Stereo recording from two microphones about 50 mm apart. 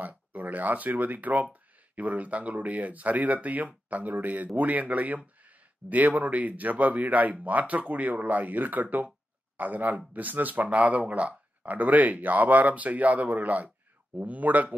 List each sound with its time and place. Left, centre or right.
0.1 s speech: right